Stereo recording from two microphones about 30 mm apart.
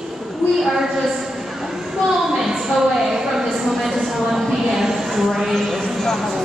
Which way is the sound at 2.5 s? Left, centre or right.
Centre.